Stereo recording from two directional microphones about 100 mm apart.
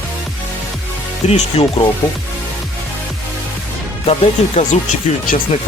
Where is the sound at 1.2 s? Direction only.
85° left.